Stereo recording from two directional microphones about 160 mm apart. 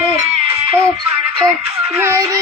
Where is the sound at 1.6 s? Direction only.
40° right (ahead or behind).